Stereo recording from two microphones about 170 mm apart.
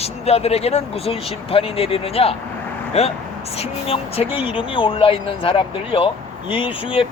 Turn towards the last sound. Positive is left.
turn(degrees=35)  # may be behind; listen again after turning